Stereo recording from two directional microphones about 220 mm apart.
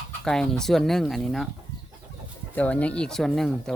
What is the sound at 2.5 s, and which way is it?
Speech, 5° left (ahead or behind).